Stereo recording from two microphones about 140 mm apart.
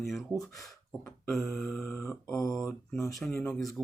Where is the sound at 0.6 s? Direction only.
5° left (ahead or behind).